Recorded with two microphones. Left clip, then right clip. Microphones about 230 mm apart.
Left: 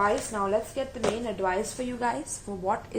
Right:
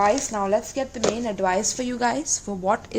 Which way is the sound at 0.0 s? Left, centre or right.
Right.